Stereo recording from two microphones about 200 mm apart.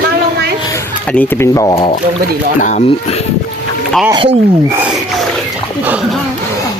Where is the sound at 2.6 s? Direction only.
40° left (ahead or behind).